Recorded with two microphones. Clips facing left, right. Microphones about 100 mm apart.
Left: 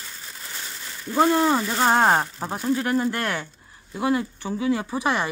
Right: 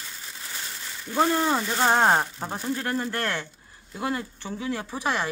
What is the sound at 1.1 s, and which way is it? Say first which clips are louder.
Speech: left 4 dB; 10° left (ahead or behind).